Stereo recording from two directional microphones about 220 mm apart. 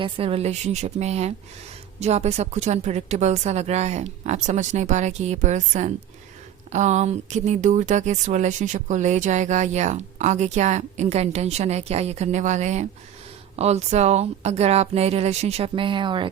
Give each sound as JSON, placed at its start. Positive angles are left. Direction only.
{"t": 0.0, "sound": "a woman's voice", "side_deg": -25}